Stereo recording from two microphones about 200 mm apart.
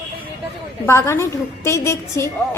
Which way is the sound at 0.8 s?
15° left (ahead or behind).